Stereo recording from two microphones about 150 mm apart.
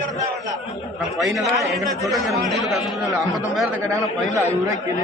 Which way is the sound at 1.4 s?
20° right (ahead or behind).